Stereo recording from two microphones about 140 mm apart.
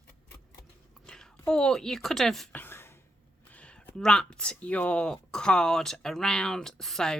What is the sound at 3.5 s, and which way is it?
Speech, 10° left (ahead or behind).